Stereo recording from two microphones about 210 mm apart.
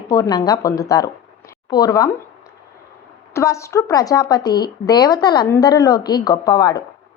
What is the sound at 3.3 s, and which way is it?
Speech, 15° left (ahead or behind).